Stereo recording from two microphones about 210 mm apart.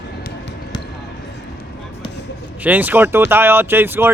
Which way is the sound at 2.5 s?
5° right (ahead or behind).